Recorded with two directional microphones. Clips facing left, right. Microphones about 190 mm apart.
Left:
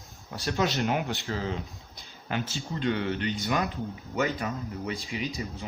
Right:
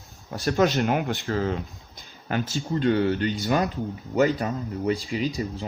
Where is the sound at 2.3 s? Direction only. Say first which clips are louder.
Right 6 dB; 40° right (ahead or behind).